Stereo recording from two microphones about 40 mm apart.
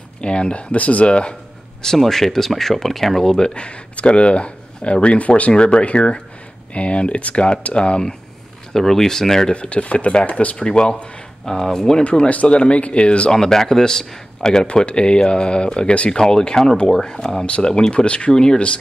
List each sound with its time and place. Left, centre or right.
0.2 s speech: left
2.0 s speech: centre; by 8.2 s left
8.7 s speech: centre
9.5 s speech: left
10.6 s speech: centre
12.0 s speech: left
13.3 s speech: centre; by 16.1 s left
16.1 s speech: centre
18.3 s speech: centre